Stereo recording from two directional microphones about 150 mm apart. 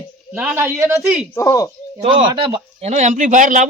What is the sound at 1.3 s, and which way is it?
Speech, 20° left (ahead or behind).